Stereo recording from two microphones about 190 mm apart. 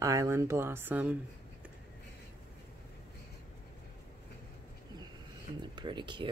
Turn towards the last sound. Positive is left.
turn(degrees=-25)  # may be behind; listen again after turning